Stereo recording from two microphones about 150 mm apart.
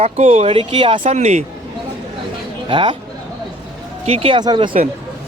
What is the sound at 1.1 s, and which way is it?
Speech, 50° right (ahead or behind).